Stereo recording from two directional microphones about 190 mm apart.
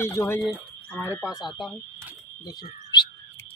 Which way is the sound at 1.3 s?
Centre (ahead or behind).